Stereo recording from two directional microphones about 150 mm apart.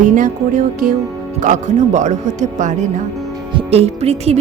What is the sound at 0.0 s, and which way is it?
Music, 55° right (ahead or behind).